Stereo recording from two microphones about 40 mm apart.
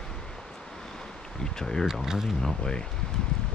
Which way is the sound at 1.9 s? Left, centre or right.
Centre.